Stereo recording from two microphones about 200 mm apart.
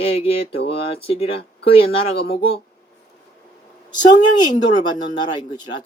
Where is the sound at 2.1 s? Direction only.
50° left (ahead or behind).